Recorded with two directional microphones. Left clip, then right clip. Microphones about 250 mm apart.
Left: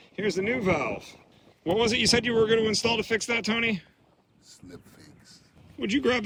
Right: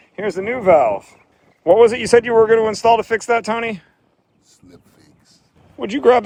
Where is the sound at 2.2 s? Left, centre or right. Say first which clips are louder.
Right 10 dB; centre.